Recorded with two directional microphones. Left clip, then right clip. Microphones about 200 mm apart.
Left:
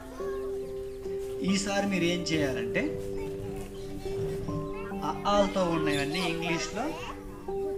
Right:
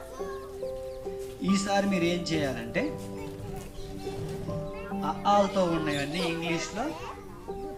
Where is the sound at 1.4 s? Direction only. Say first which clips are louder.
Right 3 dB; 25° left (ahead or behind).